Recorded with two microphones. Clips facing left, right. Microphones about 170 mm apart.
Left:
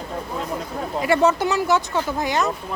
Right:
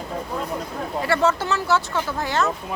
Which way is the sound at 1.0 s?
15° left (ahead or behind).